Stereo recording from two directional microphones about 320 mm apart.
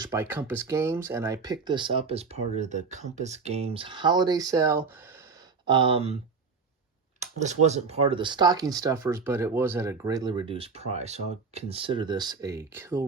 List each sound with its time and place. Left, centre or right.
0.0 s speech: centre
7.2 s speech: right